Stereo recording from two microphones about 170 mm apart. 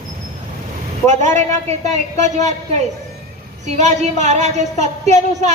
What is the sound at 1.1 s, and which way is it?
A woman's voice, 45° right (ahead or behind).